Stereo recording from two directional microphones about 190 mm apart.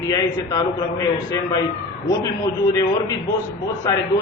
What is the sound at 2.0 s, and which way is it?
Speech, 25° left (ahead or behind).